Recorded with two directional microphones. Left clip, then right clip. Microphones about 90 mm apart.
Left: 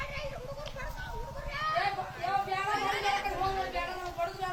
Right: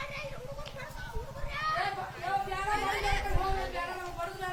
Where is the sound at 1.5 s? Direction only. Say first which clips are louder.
Left 1 dB; 25° right (ahead or behind).